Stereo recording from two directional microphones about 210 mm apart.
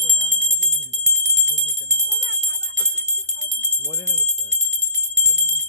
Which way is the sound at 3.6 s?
15° right (ahead or behind).